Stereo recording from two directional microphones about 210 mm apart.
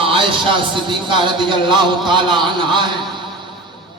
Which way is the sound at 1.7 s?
20° right (ahead or behind).